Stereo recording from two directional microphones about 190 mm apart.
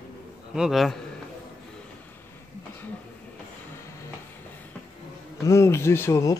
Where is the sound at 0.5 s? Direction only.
Centre (ahead or behind).